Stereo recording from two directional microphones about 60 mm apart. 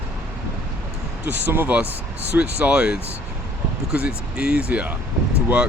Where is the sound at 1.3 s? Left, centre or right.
Right.